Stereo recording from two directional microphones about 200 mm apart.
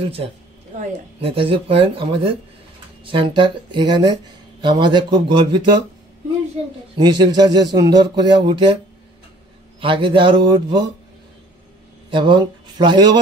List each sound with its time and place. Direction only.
0.7 s speech: 30° right (ahead or behind)
3.1 s speech: 25° right (ahead or behind)
7.0 s speech: 20° right (ahead or behind)
9.8 s speech: 25° right (ahead or behind)
12.1 s speech: 25° right (ahead or behind)